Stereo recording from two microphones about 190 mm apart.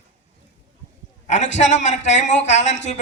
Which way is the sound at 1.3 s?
40° left (ahead or behind).